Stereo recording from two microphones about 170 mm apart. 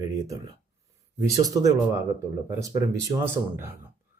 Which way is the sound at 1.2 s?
20° right (ahead or behind).